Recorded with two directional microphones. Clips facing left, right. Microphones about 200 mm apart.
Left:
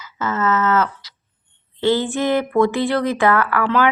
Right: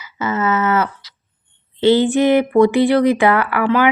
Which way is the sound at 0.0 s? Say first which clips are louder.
Right 2 dB; 10° right (ahead or behind).